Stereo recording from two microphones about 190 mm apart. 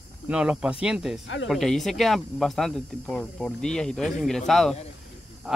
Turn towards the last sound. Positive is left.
turn(degrees=-5)  # may be behind; listen again after turning